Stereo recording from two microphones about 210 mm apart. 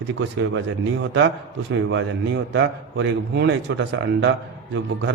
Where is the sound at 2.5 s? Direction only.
60° right (ahead or behind).